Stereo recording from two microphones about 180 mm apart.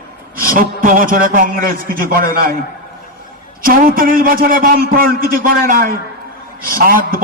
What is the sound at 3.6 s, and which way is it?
A man's voice, 50° right (ahead or behind).